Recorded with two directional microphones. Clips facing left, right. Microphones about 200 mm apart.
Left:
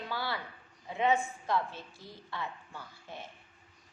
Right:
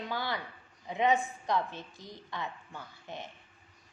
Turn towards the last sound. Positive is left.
turn(degrees=-20)  # may be behind; listen again after turning